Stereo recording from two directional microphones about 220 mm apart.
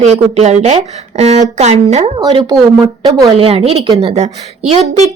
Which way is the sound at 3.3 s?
25° right (ahead or behind).